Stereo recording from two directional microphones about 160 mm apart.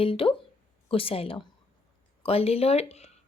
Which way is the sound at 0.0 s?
35° left (ahead or behind).